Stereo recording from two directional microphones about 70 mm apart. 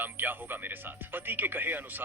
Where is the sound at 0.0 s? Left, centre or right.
Right.